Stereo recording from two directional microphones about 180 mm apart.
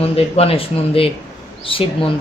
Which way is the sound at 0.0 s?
35° left (ahead or behind).